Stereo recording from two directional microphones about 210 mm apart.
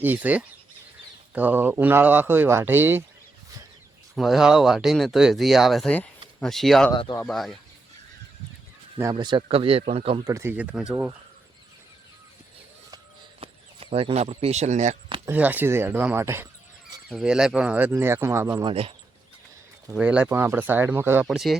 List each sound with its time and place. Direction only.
0.0 s speech: 10° right (ahead or behind)
4.1 s speech: centre (ahead or behind)
6.9 s speech: 20° left (ahead or behind)
7.2 s speech: centre (ahead or behind)
9.0 s speech: 15° right (ahead or behind)
10.3 s speech: 10° right (ahead or behind)
13.4 s speech: 25° right (ahead or behind)
15.3 s speech: 10° right (ahead or behind)
18.7 s speech: 25° right (ahead or behind)
19.9 s speech: 5° right (ahead or behind)